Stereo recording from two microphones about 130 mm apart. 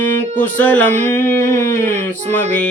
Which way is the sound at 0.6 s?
10° left (ahead or behind).